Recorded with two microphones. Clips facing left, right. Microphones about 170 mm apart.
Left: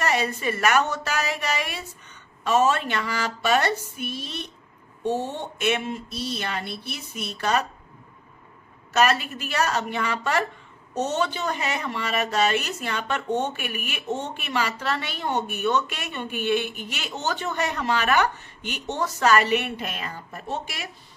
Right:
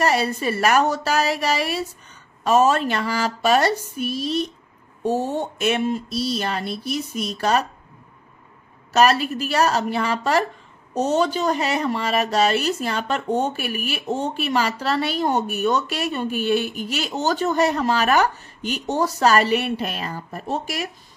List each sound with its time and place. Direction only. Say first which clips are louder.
0.0 s speech: right 4 dB; 35° right (ahead or behind)
8.9 s speech: right 4 dB; 35° right (ahead or behind)